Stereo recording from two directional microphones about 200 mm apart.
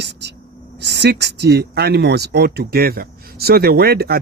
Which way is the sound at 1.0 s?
55° right (ahead or behind).